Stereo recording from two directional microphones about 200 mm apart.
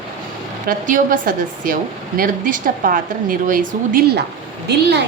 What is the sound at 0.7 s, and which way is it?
A woman's voice, 40° right (ahead or behind).